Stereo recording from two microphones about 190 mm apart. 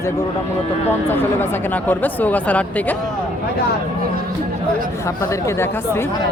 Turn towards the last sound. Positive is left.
turn(degrees=15)  # may be behind; listen again after turning